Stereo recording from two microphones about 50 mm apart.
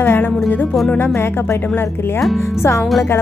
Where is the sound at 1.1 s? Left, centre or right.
Left.